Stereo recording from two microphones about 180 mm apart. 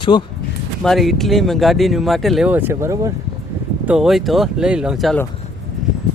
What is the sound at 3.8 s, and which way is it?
Speech, 5° right (ahead or behind).